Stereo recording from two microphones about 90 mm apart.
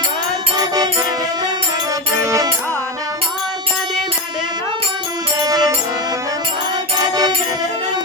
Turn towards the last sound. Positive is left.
turn(degrees=-45)  # may be behind; listen again after turning